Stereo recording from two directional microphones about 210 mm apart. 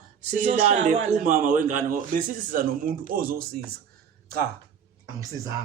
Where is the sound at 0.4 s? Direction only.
35° right (ahead or behind).